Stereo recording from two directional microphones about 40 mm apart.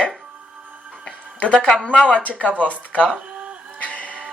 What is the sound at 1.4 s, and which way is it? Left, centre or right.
Speech, left.